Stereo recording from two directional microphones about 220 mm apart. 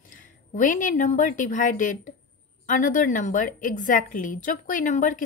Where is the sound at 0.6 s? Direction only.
35° left (ahead or behind).